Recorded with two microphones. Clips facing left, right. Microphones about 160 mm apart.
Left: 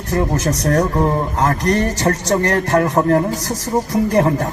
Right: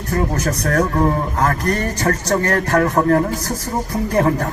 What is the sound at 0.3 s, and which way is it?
A man's voice, 20° left (ahead or behind).